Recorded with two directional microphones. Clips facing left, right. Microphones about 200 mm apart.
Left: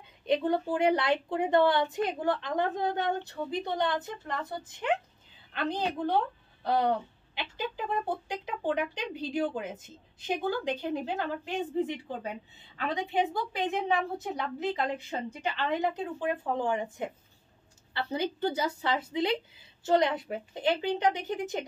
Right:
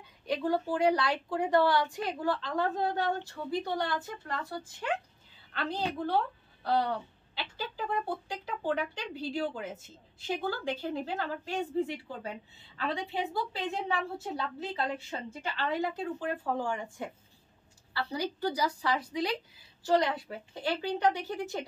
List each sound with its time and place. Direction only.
0.3 s a woman's voice: 25° left (ahead or behind)
18.1 s speech: 25° left (ahead or behind)